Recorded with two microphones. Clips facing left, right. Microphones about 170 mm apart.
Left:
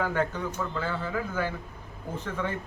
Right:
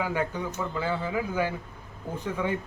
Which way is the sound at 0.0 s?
10° right (ahead or behind).